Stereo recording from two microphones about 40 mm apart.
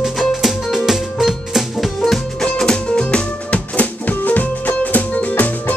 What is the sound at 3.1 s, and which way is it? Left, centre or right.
Music, left.